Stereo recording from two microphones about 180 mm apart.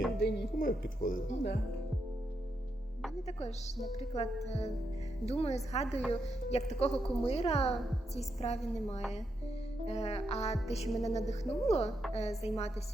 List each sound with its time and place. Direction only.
0.2 s speech: 60° left (ahead or behind)
3.2 s a woman's voice: 35° left (ahead or behind)